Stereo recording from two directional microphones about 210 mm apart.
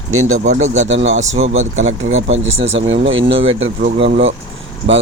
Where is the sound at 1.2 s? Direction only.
65° right (ahead or behind).